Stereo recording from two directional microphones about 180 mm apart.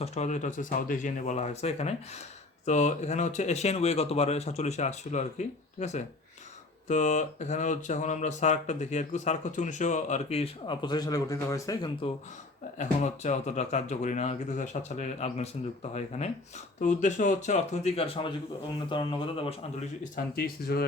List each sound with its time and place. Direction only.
0.0 s speech: 40° left (ahead or behind); by 11.9 s 20° left (ahead or behind)
12.8 s speech: 40° left (ahead or behind)
20.1 s speech: 55° left (ahead or behind)